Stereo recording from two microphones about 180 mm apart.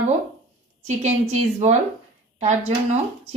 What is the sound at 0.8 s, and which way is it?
A woman's voice, 40° right (ahead or behind).